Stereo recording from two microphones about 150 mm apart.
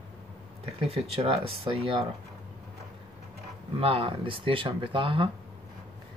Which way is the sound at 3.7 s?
35° right (ahead or behind).